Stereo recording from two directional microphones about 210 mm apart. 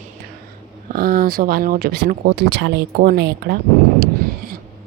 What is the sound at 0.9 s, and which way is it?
A woman's voice, 45° right (ahead or behind).